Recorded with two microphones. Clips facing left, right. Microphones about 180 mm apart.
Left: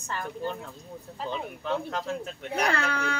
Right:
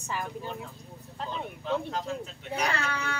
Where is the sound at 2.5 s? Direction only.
60° left (ahead or behind).